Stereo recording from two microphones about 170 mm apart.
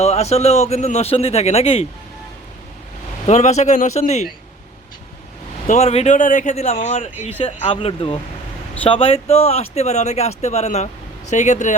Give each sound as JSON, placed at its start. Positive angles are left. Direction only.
{"t": 0.0, "sound": "a man's voice", "side_deg": 40}
{"t": 3.2, "sound": "a man's voice", "side_deg": 40}
{"t": 5.6, "sound": "a man's voice", "side_deg": 40}